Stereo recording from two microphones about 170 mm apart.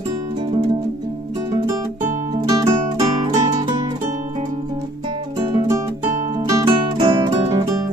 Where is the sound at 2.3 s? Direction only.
25° right (ahead or behind).